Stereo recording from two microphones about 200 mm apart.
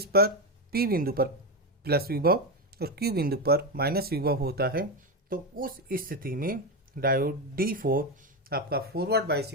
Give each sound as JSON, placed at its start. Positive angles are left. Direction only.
{"t": 0.0, "sound": "speech", "side_deg": -50}